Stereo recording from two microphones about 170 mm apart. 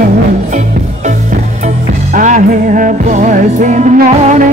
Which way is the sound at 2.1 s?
50° right (ahead or behind).